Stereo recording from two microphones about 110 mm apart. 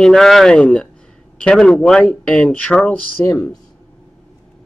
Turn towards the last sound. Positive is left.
turn(degrees=20)  # may be behind; listen again after turning